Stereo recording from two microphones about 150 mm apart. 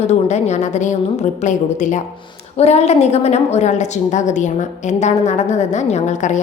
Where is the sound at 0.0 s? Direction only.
50° left (ahead or behind).